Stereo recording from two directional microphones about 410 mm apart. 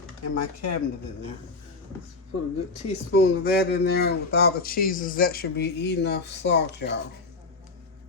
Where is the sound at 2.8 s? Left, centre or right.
Centre.